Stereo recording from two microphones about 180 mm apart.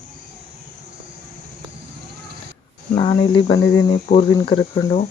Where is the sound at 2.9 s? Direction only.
25° left (ahead or behind).